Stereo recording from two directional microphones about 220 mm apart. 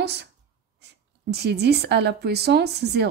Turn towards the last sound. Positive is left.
turn(degrees=-50)  # may be behind; listen again after turning